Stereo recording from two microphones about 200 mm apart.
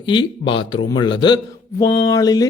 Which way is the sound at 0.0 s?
25° left (ahead or behind).